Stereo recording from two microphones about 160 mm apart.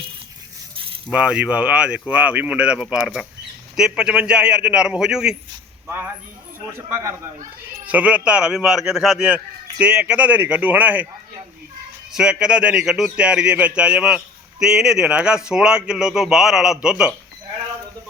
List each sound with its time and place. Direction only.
1.1 s speech: 5° right (ahead or behind)
6.7 s speech: 15° right (ahead or behind)
12.1 s speech: 5° right (ahead or behind)